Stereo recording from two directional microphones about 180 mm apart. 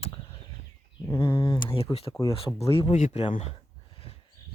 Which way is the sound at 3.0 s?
45° left (ahead or behind).